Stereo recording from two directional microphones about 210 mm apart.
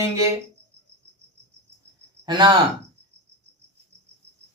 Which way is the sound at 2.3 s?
20° right (ahead or behind).